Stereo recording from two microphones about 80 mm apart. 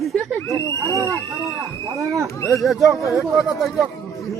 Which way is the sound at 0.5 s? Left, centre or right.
Right.